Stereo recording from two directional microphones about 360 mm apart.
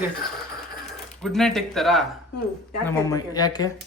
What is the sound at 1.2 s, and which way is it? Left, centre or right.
Speech, centre.